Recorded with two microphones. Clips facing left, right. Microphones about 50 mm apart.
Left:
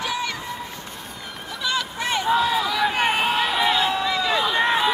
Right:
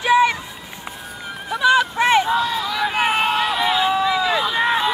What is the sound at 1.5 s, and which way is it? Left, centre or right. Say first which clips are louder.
Run: right 10 dB; right.